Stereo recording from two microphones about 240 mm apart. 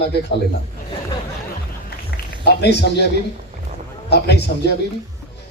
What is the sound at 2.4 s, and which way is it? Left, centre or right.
Speech, left.